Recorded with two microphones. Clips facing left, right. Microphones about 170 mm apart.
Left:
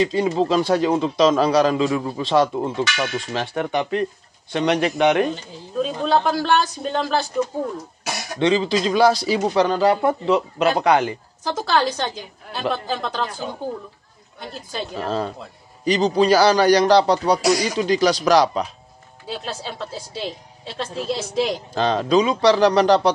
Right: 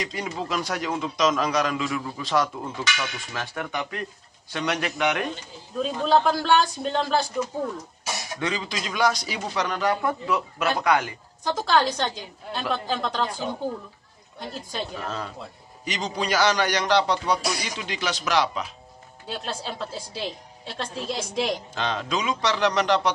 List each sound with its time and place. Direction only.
0.0 s a man's voice: 25° left (ahead or behind)
5.8 s a woman's voice: centre (ahead or behind)
8.4 s a man's voice: 25° left (ahead or behind)
11.4 s a woman's voice: 5° left (ahead or behind)
15.0 s a man's voice: 30° left (ahead or behind)
19.2 s a woman's voice: centre (ahead or behind)
21.7 s a man's voice: 35° left (ahead or behind)